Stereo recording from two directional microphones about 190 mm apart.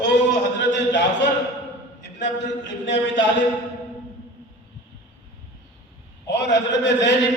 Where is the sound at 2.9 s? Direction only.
70° left (ahead or behind).